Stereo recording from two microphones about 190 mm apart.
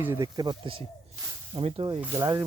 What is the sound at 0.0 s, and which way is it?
Speech, 15° right (ahead or behind).